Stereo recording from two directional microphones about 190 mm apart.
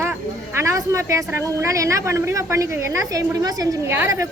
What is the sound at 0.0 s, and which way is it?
A woman's voice, 15° right (ahead or behind).